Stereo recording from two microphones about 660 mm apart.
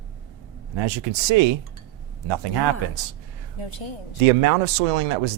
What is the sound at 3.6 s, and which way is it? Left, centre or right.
Speech, left.